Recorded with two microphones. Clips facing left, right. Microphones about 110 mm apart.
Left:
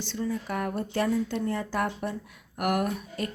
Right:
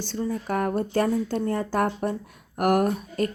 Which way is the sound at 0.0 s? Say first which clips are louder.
Right 2 dB; 40° right (ahead or behind).